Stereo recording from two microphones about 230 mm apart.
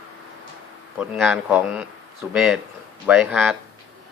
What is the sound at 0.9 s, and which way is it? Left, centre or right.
Speech, centre.